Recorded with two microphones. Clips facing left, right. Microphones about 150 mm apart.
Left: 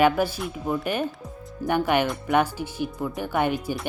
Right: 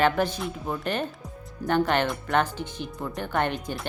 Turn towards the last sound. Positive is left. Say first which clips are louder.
# left 3 dB
turn(degrees=10)  # may be behind; listen again after turning